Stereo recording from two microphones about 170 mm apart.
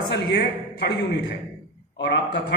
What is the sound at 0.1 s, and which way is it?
A man's voice, 80° left.